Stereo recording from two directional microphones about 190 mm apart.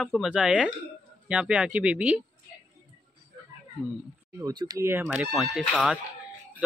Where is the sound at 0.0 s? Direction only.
Centre (ahead or behind).